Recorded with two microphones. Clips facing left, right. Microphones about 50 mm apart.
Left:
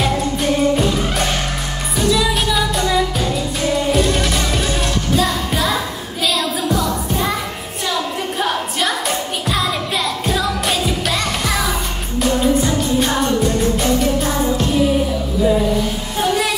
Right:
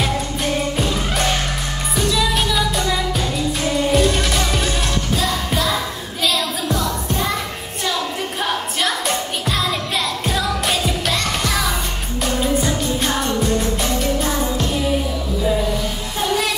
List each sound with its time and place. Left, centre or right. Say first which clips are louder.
0.0 s music: left 3 dB; centre
8.4 s music: left 2 dB; centre
12.2 s music of asia: left 4 dB; centre